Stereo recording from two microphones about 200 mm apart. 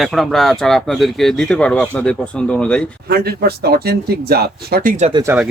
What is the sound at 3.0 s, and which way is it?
Speech, 50° right (ahead or behind).